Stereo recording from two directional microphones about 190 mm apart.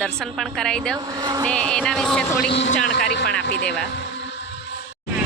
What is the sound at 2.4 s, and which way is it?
Speech, 65° left (ahead or behind).